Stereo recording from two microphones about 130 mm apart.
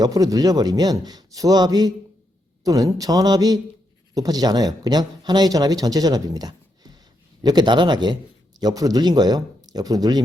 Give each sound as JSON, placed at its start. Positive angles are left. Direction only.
{"t": 0.0, "sound": "a man's voice", "side_deg": -30}